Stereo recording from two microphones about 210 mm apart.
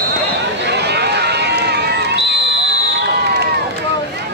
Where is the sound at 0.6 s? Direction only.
50° right (ahead or behind).